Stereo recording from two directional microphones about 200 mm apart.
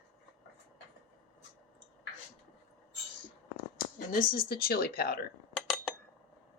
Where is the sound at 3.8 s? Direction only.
45° left (ahead or behind).